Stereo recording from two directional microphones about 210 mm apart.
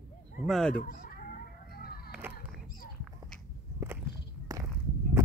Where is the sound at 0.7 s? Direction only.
45° left (ahead or behind).